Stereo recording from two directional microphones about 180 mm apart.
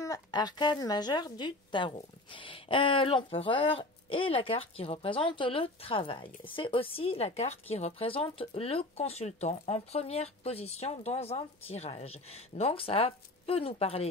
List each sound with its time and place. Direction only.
0.0 s a woman's voice: 20° left (ahead or behind)